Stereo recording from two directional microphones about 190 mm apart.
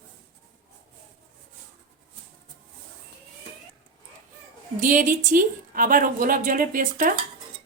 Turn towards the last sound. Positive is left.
turn(degrees=-45)  # may be behind; listen again after turning